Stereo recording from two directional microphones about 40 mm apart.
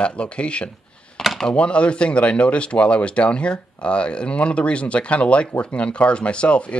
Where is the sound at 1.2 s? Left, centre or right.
Centre.